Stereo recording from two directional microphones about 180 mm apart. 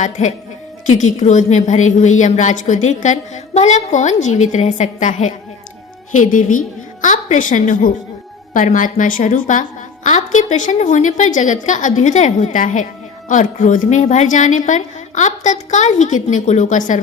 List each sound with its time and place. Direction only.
0.0 s a woman's voice: 40° left (ahead or behind)